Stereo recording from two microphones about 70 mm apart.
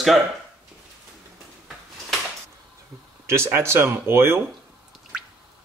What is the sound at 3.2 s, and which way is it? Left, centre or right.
Speech, right.